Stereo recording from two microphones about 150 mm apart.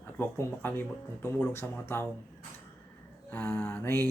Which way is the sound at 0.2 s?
15° left (ahead or behind).